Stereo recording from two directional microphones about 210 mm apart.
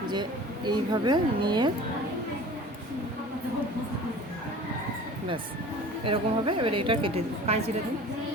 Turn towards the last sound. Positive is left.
turn(degrees=-30)  # may be behind; listen again after turning